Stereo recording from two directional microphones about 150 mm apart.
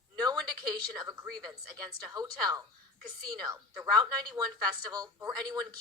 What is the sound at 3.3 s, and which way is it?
Speech, 25° right (ahead or behind).